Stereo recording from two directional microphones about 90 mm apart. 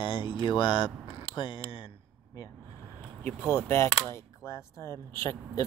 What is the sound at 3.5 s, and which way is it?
Speech, 30° left (ahead or behind).